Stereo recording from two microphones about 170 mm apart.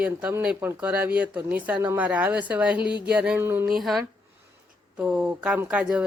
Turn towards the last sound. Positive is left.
turn(degrees=-5)  # may be behind; listen again after turning